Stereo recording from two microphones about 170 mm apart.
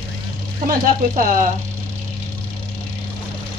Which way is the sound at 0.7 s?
50° right (ahead or behind).